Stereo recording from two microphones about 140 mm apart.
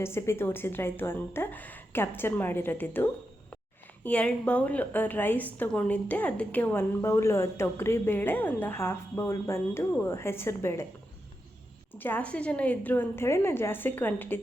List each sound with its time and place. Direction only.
0.0 s a woman's voice: 20° left (ahead or behind)
11.9 s a woman's voice: 15° left (ahead or behind)